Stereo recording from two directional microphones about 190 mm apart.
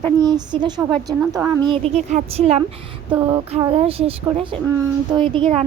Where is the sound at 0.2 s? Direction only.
20° right (ahead or behind).